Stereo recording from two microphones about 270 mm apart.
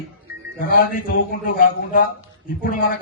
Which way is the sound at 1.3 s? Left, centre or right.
Left.